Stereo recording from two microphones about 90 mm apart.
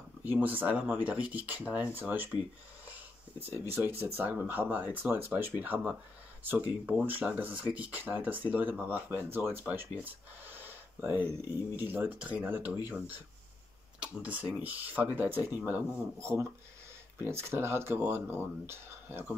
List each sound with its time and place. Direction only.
0.2 s speech: 20° right (ahead or behind)
3.7 s speech: 25° right (ahead or behind)
16.2 s speech: 30° right (ahead or behind)